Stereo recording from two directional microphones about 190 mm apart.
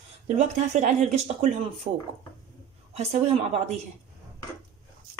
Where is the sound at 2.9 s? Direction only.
35° right (ahead or behind).